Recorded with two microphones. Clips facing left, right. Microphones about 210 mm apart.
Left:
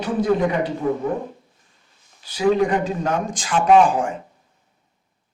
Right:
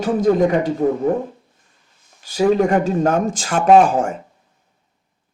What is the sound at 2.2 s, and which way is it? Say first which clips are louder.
Speech: right 3 dB; 45° right (ahead or behind).